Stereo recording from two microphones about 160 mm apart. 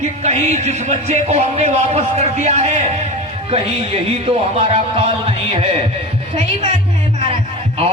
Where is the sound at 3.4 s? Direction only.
35° right (ahead or behind).